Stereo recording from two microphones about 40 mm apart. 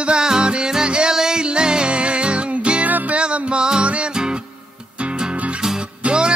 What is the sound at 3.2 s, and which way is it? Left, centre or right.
Music, right.